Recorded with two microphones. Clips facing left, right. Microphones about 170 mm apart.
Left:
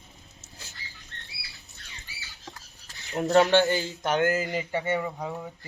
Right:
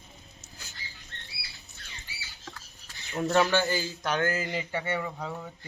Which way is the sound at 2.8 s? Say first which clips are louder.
Left 2 dB; 35° left (ahead or behind).